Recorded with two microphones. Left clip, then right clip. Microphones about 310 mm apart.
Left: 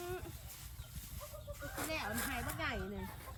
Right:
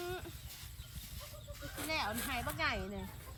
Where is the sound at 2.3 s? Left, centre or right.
Centre.